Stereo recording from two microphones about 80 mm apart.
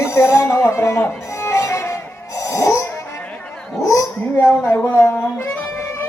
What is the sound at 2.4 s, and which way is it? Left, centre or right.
Snoring, left.